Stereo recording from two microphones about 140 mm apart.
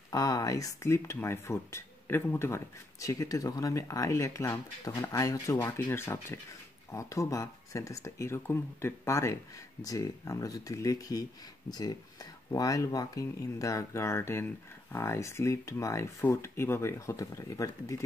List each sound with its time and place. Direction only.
0.1 s speech: 25° left (ahead or behind)